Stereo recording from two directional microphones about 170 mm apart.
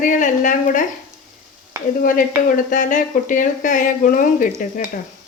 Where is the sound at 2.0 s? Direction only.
55° left (ahead or behind).